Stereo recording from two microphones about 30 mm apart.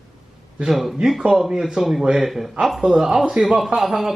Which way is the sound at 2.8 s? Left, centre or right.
Centre.